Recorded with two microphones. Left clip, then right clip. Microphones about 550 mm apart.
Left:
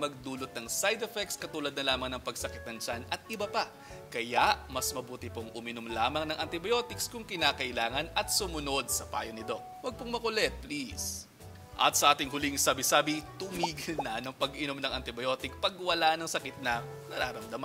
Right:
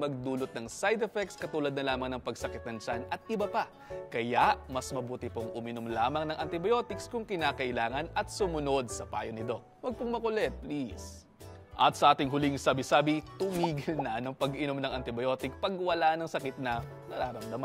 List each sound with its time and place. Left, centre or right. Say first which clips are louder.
0.0 s speech: right 2 dB; right
11.8 s a man's voice: right 1 dB; right